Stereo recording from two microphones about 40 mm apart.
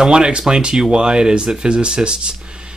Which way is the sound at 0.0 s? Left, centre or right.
Right.